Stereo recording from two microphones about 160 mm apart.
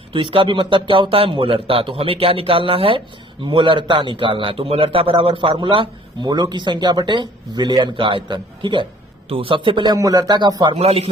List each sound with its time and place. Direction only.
0.1 s a man's voice: 30° right (ahead or behind)
10.8 s a man's voice: 40° right (ahead or behind)